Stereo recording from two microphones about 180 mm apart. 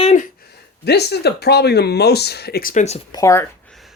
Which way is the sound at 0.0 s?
40° left (ahead or behind).